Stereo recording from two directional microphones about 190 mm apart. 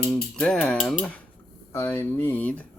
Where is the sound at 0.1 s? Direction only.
5° left (ahead or behind).